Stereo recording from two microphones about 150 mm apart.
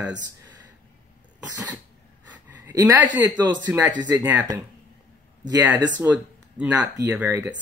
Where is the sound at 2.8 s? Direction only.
10° right (ahead or behind).